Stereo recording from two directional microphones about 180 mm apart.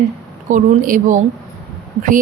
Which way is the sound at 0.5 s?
45° right (ahead or behind).